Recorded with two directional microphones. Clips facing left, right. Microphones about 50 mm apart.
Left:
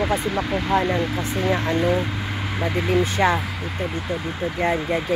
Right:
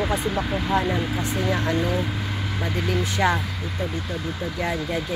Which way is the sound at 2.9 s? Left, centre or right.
Left.